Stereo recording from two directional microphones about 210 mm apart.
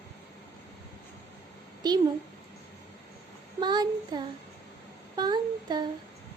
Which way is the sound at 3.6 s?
20° right (ahead or behind).